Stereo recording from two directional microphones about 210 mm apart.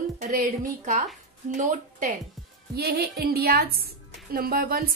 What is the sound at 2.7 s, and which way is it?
Speech, 50° right (ahead or behind).